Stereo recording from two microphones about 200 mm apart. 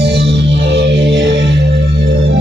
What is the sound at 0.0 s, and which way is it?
Music, 55° right (ahead or behind).